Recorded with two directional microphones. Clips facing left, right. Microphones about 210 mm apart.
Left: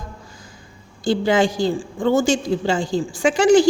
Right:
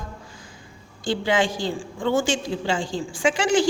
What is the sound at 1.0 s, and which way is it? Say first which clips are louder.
A woman's voice: left 5 dB; 40° left (ahead or behind).